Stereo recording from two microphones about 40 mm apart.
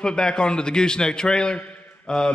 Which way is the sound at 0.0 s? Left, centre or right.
Centre.